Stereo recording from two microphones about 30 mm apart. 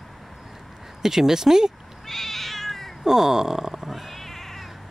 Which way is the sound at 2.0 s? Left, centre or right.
Centre.